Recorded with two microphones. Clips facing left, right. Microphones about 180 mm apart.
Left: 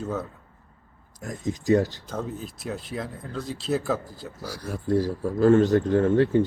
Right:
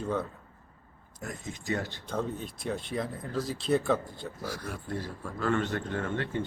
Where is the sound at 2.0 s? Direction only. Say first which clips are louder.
Left 1 dB; 5° left (ahead or behind).